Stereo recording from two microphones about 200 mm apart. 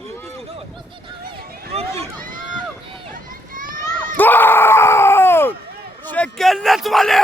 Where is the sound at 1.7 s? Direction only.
30° right (ahead or behind).